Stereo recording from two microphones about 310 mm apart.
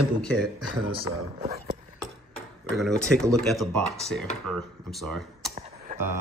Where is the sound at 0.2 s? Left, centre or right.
Centre.